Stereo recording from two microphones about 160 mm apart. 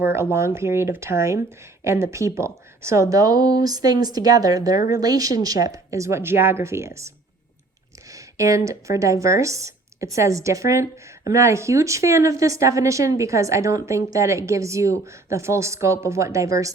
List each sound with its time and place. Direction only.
0.0 s a woman's voice: 15° right (ahead or behind)
8.1 s a woman's voice: 20° right (ahead or behind)